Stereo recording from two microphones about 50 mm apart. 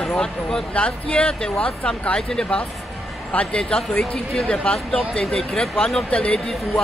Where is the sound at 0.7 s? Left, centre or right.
Left.